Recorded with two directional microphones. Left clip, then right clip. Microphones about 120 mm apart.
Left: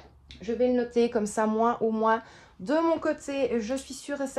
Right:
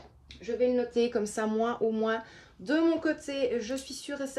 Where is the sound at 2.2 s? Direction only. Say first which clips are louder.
Left 2 dB; 60° left (ahead or behind).